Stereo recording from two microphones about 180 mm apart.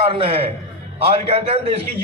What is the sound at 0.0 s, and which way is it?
A man's voice, 30° right (ahead or behind).